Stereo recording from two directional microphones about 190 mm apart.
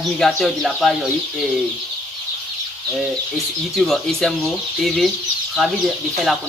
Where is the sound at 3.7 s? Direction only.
Centre (ahead or behind).